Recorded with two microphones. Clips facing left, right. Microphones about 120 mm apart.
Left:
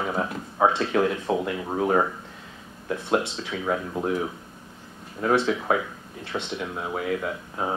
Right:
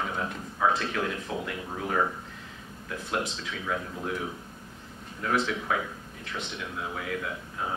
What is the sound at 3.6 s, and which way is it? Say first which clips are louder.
Speech: left 6 dB; 40° left (ahead or behind).